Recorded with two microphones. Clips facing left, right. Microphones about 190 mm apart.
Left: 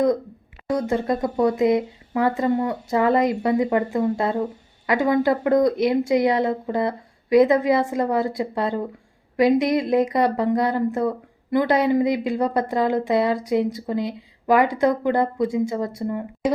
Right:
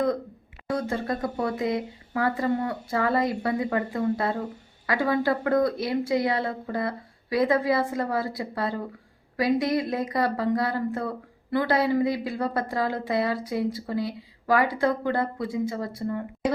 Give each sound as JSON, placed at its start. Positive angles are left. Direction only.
{"t": 0.7, "sound": "a woman's voice", "side_deg": 20}